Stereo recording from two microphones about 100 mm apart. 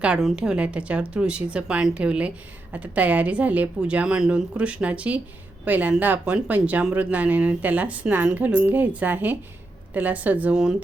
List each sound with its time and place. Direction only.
0.0 s speech: 5° right (ahead or behind)